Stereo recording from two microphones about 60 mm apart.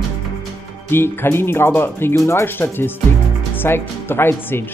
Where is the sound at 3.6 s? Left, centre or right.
Left.